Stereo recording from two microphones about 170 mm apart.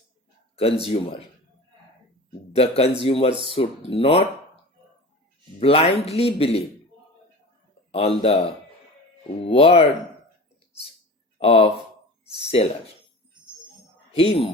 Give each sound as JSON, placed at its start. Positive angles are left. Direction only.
{"t": 0.5, "sound": "speech", "side_deg": 35}
{"t": 2.5, "sound": "speech", "side_deg": 35}
{"t": 5.5, "sound": "speech", "side_deg": 35}
{"t": 8.2, "sound": "speech", "side_deg": 35}
{"t": 11.3, "sound": "speech", "side_deg": 35}
{"t": 14.1, "sound": "speech", "side_deg": 35}